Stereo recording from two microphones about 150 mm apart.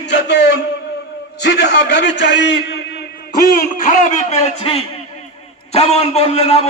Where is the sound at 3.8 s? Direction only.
60° left (ahead or behind).